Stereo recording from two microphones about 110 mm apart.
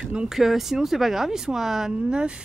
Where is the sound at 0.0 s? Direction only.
10° right (ahead or behind).